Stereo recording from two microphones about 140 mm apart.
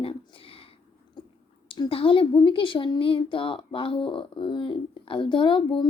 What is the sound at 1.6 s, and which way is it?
Speech, 35° left (ahead or behind).